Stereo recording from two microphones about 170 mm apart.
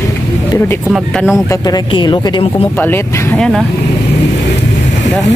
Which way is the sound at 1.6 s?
25° left (ahead or behind).